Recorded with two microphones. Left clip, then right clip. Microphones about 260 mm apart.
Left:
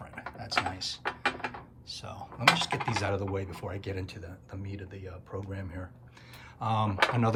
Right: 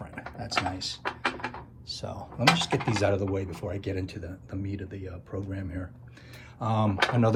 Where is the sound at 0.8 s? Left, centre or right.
Centre.